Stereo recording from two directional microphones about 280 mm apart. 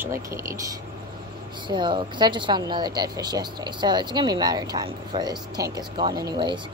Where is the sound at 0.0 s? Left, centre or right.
Centre.